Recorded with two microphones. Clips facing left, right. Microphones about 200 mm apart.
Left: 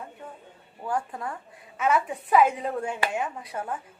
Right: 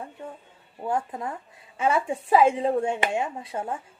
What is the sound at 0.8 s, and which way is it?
A woman's voice, 20° right (ahead or behind).